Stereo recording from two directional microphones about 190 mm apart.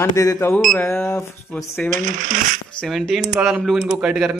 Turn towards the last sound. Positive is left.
turn(degrees=-10)  # may be behind; listen again after turning